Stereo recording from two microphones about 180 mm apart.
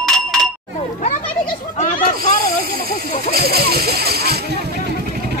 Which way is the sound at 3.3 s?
60° right (ahead or behind).